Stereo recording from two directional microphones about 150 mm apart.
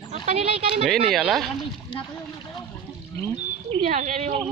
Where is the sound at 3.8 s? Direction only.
55° right (ahead or behind).